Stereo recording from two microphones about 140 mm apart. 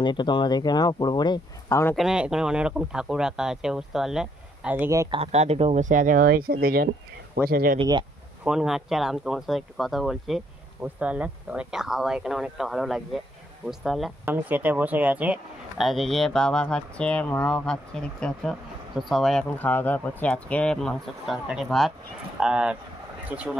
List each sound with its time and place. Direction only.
0.0 s speech: 35° left (ahead or behind)
2.0 s speech: 5° right (ahead or behind); by 5.1 s 20° right (ahead or behind)
5.1 s speech: 50° right (ahead or behind)
5.9 s speech: 75° right (ahead or behind); by 7.8 s 90° right
8.5 s speech: 5° right (ahead or behind)
14.2 s speech: 15° right (ahead or behind)
15.9 s speech: centre (ahead or behind)
19.6 s speech: 10° left (ahead or behind); by 23.5 s 10° right (ahead or behind)